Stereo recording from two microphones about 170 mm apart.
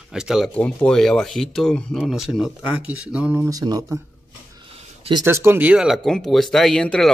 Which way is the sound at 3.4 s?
20° right (ahead or behind).